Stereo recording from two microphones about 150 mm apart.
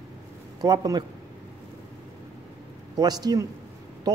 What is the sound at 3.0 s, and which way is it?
Speech, 25° right (ahead or behind).